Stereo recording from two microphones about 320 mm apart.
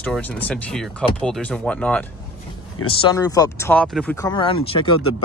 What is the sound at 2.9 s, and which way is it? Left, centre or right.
Speech, centre.